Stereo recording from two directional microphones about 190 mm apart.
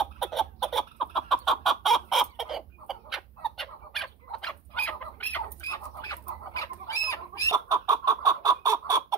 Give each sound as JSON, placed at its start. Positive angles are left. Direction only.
{"t": 0.0, "sound": "chicken", "side_deg": 0}
{"t": 7.5, "sound": "chicken", "side_deg": -20}